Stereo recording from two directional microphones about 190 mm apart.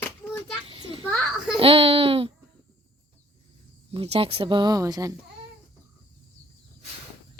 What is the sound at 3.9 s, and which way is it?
Speech, 30° right (ahead or behind).